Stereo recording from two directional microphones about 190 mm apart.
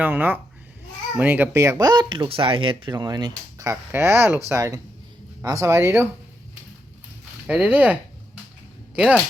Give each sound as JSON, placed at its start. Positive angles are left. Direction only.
{"t": 0.0, "sound": "speech", "side_deg": -10}
{"t": 7.4, "sound": "speech", "side_deg": -5}
{"t": 9.0, "sound": "speech", "side_deg": -5}